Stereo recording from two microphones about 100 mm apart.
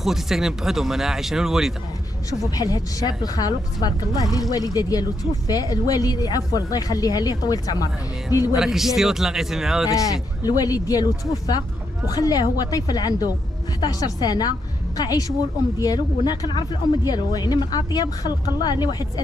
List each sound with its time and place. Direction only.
0.0 s speech: 5° right (ahead or behind)
2.5 s speech: 35° left (ahead or behind)
8.5 s speech: 5° right (ahead or behind)
9.8 s speech: 35° left (ahead or behind)